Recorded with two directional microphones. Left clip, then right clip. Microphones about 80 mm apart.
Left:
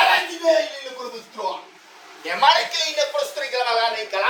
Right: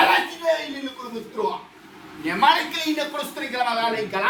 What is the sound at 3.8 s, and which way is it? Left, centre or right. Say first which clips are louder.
Speech: left 1 dB; right.